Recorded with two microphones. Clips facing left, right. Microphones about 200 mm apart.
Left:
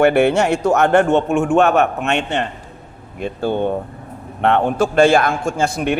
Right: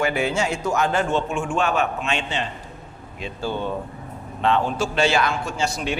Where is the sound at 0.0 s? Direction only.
65° left (ahead or behind).